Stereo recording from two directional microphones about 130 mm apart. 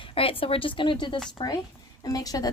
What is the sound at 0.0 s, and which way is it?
A woman's voice, 45° left (ahead or behind).